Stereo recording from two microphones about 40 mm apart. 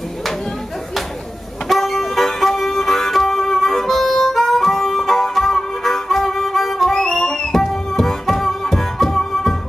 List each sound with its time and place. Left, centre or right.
1.7 s music: centre
6.9 s music: centre
7.5 s music: centre